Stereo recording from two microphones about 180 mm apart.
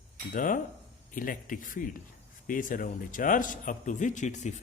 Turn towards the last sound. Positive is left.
turn(degrees=40)  # may be behind; listen again after turning